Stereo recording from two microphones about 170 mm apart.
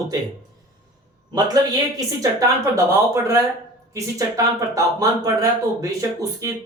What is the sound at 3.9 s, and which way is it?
Speech, 20° right (ahead or behind).